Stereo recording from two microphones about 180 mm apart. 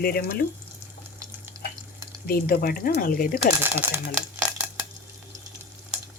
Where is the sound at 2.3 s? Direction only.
55° left (ahead or behind).